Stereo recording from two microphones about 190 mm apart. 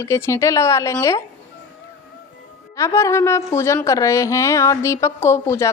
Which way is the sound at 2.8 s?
15° left (ahead or behind).